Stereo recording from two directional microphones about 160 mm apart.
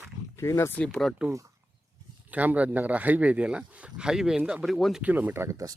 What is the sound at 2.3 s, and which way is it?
A man's voice, 10° right (ahead or behind).